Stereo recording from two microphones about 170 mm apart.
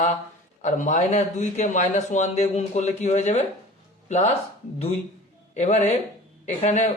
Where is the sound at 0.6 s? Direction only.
45° left (ahead or behind).